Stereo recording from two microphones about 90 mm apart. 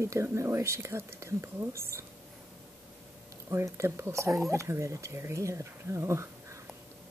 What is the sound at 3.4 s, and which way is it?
Speech, 35° right (ahead or behind).